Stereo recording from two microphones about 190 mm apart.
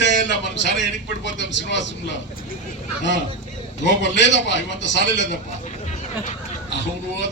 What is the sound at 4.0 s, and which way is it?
A man's voice, 70° left (ahead or behind).